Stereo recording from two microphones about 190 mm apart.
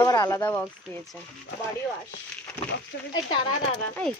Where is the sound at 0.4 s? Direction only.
10° left (ahead or behind).